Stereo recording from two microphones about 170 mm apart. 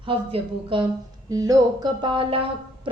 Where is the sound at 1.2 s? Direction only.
20° right (ahead or behind).